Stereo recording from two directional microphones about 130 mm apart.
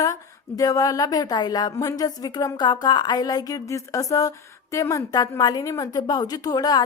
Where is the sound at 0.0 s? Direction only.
25° left (ahead or behind).